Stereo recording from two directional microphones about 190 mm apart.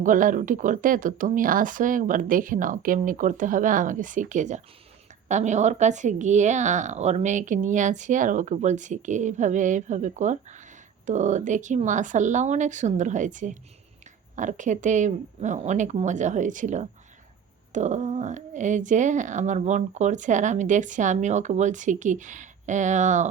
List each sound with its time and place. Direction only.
0.0 s speech: 45° right (ahead or behind)